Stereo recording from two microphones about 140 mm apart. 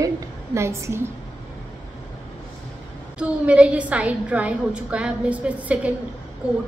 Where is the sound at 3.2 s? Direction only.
10° right (ahead or behind).